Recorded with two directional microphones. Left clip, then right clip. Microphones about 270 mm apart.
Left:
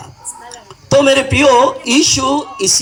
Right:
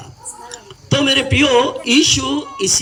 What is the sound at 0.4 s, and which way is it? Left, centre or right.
A man's voice, left.